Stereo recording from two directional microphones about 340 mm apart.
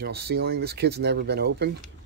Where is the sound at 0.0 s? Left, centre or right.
Right.